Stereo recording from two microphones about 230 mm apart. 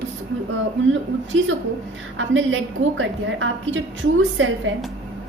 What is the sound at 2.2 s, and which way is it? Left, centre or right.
A woman's voice, right.